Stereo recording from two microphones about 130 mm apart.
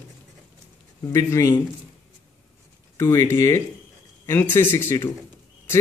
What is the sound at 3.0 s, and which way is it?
A man's voice, 20° left (ahead or behind).